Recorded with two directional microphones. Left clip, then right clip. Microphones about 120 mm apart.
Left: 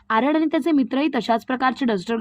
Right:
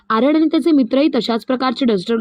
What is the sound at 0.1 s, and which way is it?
Speech, 35° right (ahead or behind).